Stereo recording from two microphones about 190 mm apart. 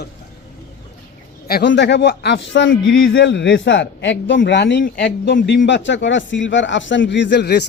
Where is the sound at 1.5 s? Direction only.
60° left (ahead or behind).